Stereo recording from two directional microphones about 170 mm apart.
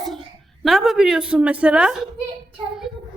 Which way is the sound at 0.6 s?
Centre (ahead or behind).